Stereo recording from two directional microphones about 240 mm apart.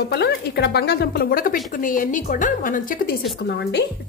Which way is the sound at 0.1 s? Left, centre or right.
Left.